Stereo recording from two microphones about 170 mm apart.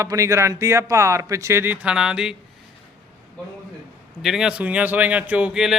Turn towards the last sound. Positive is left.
turn(degrees=-5)  # may be behind; listen again after turning